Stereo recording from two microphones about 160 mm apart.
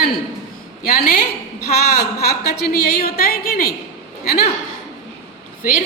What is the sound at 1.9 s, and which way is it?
A woman's voice, 75° left (ahead or behind).